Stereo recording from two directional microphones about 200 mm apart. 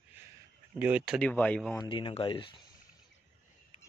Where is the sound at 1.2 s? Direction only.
5° left (ahead or behind).